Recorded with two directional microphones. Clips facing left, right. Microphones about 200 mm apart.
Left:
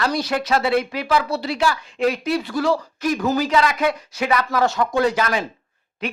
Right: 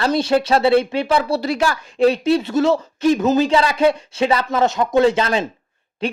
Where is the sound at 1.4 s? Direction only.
45° right (ahead or behind).